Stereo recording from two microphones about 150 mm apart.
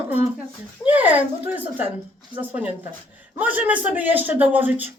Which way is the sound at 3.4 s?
10° right (ahead or behind).